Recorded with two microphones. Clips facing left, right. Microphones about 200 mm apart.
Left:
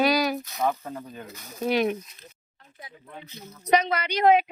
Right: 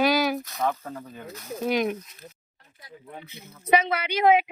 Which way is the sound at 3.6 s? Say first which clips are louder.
Even; 5° right (ahead or behind).